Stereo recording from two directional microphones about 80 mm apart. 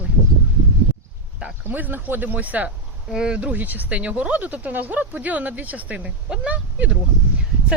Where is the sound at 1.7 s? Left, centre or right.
Right.